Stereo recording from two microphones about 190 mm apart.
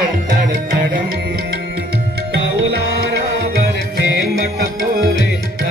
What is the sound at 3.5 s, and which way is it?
Music, 60° right (ahead or behind).